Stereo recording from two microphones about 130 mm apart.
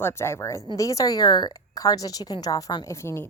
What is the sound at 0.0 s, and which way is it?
A woman's voice, 20° left (ahead or behind).